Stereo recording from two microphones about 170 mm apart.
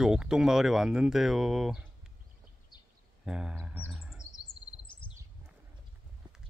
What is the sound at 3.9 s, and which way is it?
Chirp, 5° right (ahead or behind).